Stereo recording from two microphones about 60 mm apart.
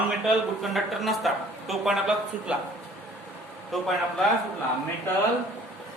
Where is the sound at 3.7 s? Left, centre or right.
Centre.